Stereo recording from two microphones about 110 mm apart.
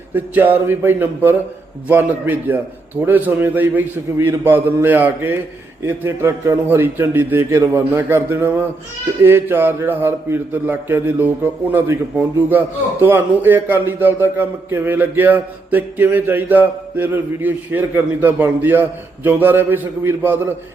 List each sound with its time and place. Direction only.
0.1 s a man's voice: 15° right (ahead or behind)